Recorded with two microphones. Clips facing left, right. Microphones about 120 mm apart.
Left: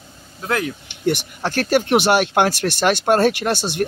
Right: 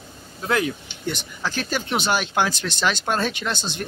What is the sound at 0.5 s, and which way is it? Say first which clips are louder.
Speech: even; centre (ahead or behind).